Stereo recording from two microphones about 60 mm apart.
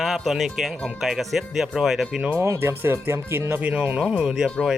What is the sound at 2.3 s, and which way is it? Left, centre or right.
Speech, right.